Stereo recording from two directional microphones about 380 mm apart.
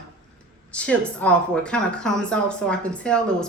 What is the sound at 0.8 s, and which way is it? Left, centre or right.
A woman's voice, centre.